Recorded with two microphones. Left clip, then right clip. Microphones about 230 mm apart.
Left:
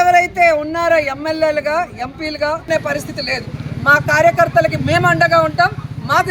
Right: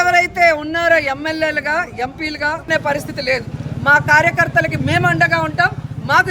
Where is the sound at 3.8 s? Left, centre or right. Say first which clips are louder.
Even; centre.